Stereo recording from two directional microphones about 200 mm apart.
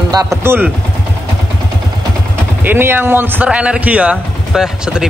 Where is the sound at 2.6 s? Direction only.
10° right (ahead or behind).